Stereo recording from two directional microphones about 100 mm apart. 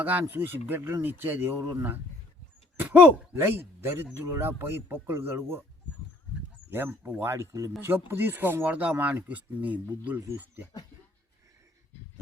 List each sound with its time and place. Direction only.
0.0 s speech: 15° right (ahead or behind)
6.7 s speech: 25° right (ahead or behind)